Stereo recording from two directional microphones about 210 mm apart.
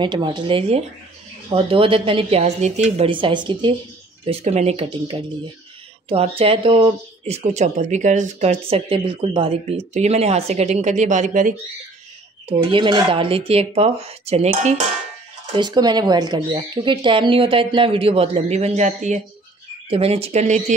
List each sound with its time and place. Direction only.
0.0 s speech: 20° right (ahead or behind); by 11.5 s 35° right (ahead or behind)
12.4 s speech: 25° right (ahead or behind)
15.5 s speech: 20° right (ahead or behind)